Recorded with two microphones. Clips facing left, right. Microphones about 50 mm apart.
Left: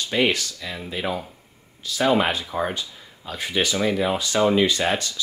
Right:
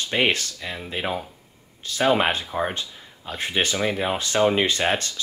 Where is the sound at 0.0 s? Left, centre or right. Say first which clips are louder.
Even; right.